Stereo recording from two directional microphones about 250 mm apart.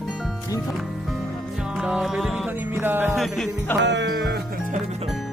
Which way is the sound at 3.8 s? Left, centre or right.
Right.